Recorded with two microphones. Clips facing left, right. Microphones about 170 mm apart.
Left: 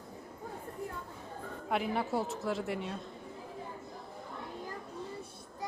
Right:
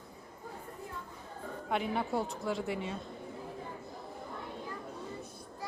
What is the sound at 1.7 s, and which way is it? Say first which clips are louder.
A woman's voice: even; centre (ahead or behind).